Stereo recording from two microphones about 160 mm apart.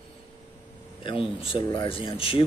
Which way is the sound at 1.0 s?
35° left (ahead or behind).